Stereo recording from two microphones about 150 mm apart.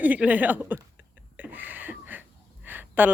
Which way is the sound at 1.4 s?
10° right (ahead or behind).